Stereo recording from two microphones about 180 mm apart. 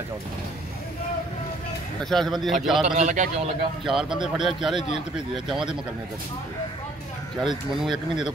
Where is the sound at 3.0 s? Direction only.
40° right (ahead or behind).